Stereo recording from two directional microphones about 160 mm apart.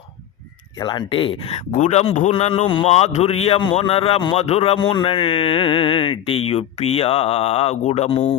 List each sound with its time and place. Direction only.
0.8 s a man's voice: 30° left (ahead or behind); by 8.4 s 45° left (ahead or behind)